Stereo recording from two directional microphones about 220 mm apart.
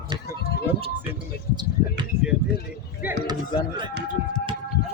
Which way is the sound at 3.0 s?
20° right (ahead or behind).